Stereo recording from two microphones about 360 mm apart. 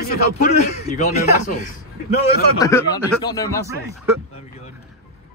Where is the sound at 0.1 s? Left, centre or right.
Left.